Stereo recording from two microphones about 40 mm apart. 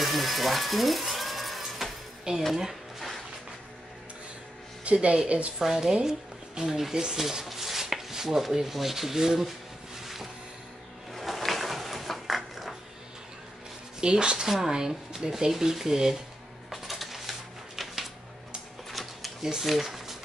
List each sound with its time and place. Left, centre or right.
0.0 s mechanisms: centre
2.3 s a woman's voice: right
4.9 s a woman's voice: right
5.6 s speech: centre
6.0 s music: centre
6.8 s speech: centre
11.1 s a sound: centre
14.0 s a woman's voice: right
16.7 s a sound: centre
18.9 s typewriter: centre
19.6 s speech: centre